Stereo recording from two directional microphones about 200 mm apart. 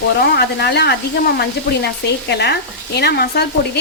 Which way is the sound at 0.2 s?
55° left (ahead or behind).